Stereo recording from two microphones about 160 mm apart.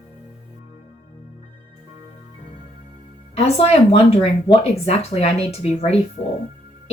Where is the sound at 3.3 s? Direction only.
40° left (ahead or behind).